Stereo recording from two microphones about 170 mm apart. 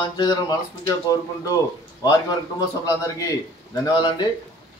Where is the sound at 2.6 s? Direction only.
20° left (ahead or behind).